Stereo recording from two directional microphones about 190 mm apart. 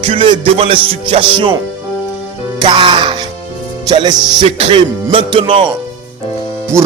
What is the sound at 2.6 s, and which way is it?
Music, 25° right (ahead or behind).